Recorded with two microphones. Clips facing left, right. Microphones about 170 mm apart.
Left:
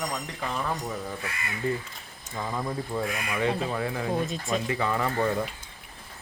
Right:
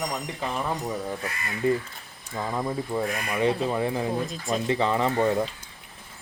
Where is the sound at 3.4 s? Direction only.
20° right (ahead or behind).